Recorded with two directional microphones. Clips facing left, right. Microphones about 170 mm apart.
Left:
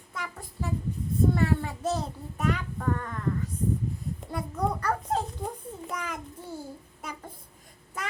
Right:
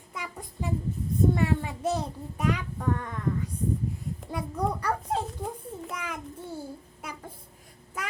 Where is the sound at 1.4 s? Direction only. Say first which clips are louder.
Even; 15° right (ahead or behind).